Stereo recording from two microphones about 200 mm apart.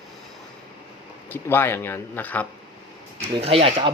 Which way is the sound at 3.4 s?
30° right (ahead or behind).